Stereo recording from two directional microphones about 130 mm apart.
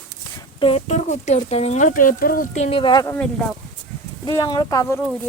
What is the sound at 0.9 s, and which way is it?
Speech, 60° left (ahead or behind).